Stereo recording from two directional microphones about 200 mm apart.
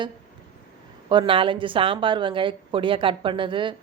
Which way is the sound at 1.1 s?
25° right (ahead or behind).